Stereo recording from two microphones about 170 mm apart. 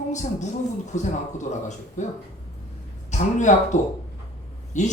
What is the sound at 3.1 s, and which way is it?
A man's voice, 45° left (ahead or behind).